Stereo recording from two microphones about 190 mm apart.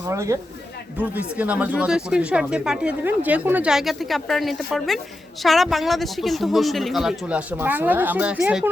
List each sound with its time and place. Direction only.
0.0 s speech: 15° right (ahead or behind)